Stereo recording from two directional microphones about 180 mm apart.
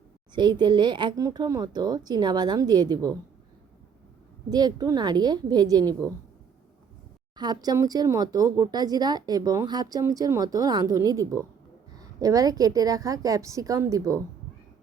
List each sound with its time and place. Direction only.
0.3 s speech: 25° right (ahead or behind)
4.4 s speech: 20° right (ahead or behind)
7.3 s speech: 20° right (ahead or behind)